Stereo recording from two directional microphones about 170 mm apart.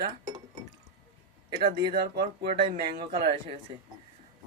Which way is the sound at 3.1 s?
65° right (ahead or behind).